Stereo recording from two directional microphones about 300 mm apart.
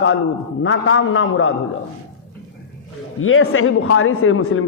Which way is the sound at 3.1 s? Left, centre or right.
Left.